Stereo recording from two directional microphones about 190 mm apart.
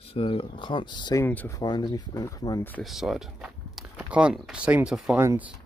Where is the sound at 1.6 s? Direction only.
20° left (ahead or behind).